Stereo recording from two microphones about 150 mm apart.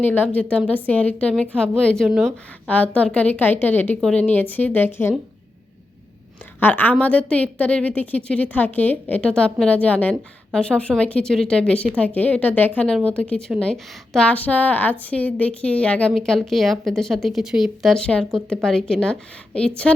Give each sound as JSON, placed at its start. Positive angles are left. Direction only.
{"t": 0.0, "sound": "a woman's voice", "side_deg": 10}
{"t": 6.6, "sound": "a woman's voice", "side_deg": 10}